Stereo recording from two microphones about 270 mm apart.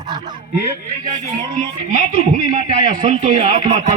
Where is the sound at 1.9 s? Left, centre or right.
Right.